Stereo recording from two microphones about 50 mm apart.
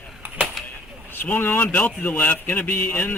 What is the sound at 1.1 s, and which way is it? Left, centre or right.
Speech, left.